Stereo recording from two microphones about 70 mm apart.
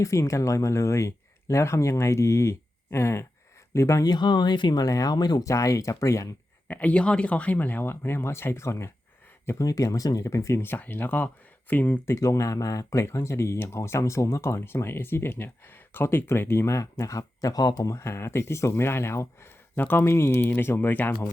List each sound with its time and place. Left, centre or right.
0.0 s speech: left
4.0 s speech: left
5.5 s speech: left
6.7 s speech: left
9.6 s speech: left
10.6 s speech: left
12.1 s speech: left
13.1 s speech: left
17.9 s speech: left